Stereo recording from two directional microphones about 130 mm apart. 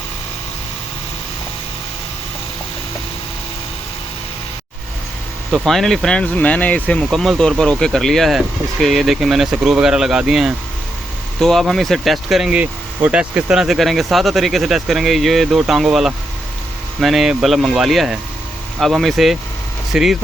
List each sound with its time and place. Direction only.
5.5 s speech: centre (ahead or behind)